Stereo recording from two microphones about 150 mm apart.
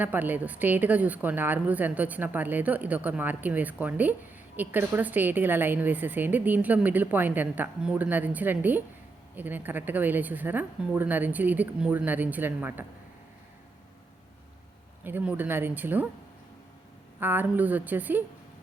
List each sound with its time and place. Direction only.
0.0 s a woman's voice: 10° right (ahead or behind)
15.0 s a woman's voice: 10° right (ahead or behind)
17.2 s a woman's voice: 15° right (ahead or behind)